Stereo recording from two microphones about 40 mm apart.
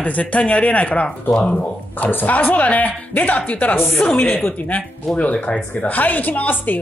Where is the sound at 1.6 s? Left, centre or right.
Left.